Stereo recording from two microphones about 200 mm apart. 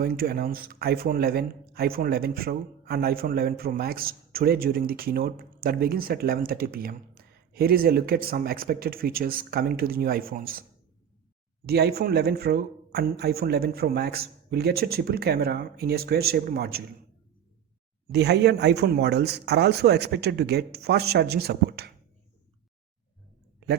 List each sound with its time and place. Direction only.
0.0 s a man's voice: 50° right (ahead or behind)
11.6 s a man's voice: 50° right (ahead or behind)
18.1 s speech: 55° right (ahead or behind)